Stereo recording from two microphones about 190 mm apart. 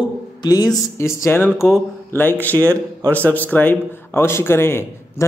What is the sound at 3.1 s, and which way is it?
Speech, 10° left (ahead or behind).